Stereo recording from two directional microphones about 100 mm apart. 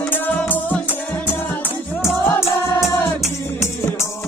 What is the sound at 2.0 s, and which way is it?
Music, 25° left (ahead or behind).